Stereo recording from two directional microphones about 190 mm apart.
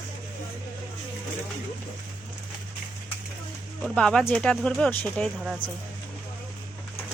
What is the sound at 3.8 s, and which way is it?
Speech, 5° left (ahead or behind).